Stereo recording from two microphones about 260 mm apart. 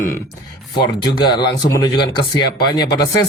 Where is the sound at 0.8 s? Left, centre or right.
Centre.